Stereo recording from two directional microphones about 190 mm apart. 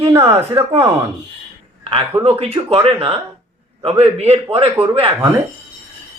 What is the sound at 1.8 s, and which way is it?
A man's voice, 30° right (ahead or behind).